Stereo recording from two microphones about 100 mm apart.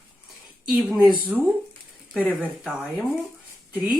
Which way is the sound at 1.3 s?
10° left (ahead or behind).